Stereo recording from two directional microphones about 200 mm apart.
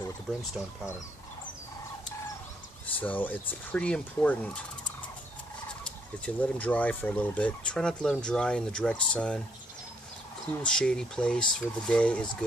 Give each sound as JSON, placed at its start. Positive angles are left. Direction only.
{"t": 0.0, "sound": "speech", "side_deg": 15}
{"t": 3.0, "sound": "speech", "side_deg": 10}
{"t": 5.9, "sound": "fowl", "side_deg": 5}
{"t": 10.6, "sound": "fowl", "side_deg": 5}